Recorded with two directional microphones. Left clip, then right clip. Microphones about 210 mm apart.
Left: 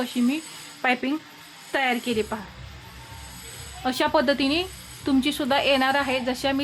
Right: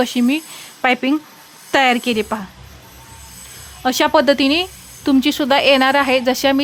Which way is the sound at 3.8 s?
35° right (ahead or behind).